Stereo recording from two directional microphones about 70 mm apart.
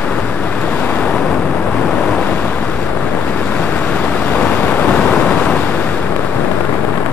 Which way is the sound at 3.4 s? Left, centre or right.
Left.